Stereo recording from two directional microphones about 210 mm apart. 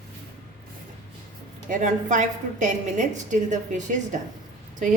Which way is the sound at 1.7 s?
35° right (ahead or behind).